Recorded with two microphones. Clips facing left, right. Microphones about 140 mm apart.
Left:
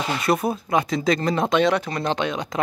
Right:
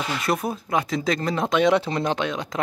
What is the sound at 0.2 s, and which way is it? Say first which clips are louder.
Speech: left 5 dB; centre (ahead or behind).